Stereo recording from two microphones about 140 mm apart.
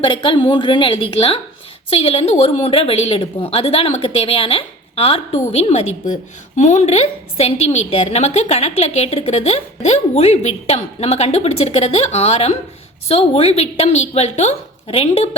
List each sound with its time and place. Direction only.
0.0 s a woman's voice: 40° left (ahead or behind)